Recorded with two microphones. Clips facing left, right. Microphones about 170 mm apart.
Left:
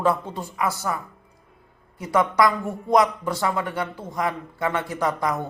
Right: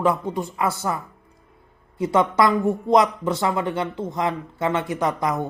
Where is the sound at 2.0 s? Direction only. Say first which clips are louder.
Right 1 dB; 20° right (ahead or behind).